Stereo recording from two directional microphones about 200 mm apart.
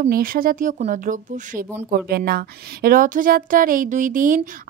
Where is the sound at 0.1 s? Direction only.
45° right (ahead or behind).